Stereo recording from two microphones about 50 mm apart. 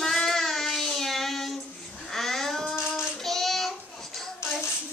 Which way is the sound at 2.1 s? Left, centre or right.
Centre.